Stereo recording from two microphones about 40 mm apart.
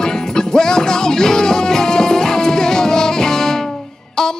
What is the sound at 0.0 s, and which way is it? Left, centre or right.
Music, centre.